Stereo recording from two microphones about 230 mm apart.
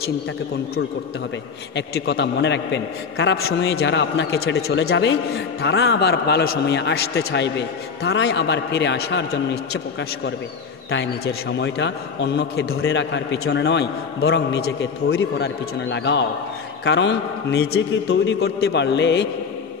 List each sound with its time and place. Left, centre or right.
1.8 s a man's voice: left